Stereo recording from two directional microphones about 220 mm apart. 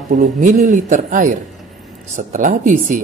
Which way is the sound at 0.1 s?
35° right (ahead or behind).